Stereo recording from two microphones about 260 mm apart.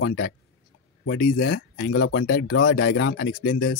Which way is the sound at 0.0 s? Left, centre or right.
Left.